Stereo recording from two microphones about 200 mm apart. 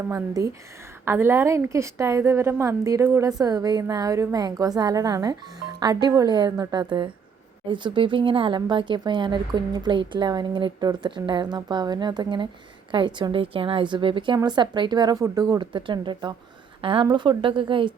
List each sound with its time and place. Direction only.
1.0 s a woman's voice: 10° right (ahead or behind)